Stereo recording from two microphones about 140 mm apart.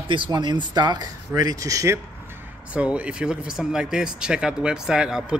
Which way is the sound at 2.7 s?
10° right (ahead or behind).